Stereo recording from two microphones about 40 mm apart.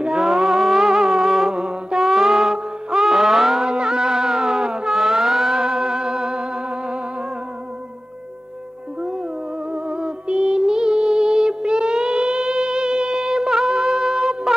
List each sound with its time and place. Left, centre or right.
0.0 s music: centre
2.0 s music: centre
3.6 s music: centre
9.7 s music: right